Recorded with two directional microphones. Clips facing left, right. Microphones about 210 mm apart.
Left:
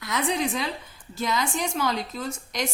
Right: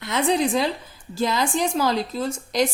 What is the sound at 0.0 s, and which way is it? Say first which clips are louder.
A woman's voice: right 5 dB; 25° right (ahead or behind).